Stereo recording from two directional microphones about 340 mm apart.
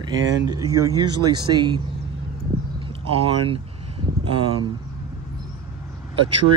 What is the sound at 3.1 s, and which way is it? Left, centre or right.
Speech, centre.